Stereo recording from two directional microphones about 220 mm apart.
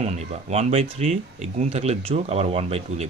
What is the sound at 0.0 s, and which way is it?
Speech, 30° right (ahead or behind).